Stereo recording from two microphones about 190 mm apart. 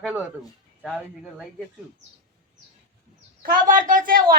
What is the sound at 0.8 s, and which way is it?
Speech, centre (ahead or behind).